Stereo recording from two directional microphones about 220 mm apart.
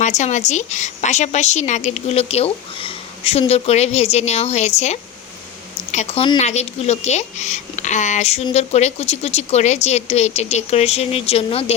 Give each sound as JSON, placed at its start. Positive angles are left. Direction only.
{"t": 0.0, "sound": "a woman's voice", "side_deg": 30}